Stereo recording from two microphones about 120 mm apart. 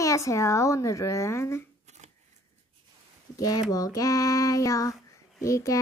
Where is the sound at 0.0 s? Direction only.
25° left (ahead or behind).